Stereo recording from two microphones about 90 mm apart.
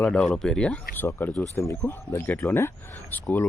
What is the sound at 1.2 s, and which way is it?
Speech, 25° left (ahead or behind).